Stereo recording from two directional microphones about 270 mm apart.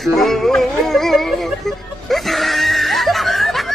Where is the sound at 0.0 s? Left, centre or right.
Centre.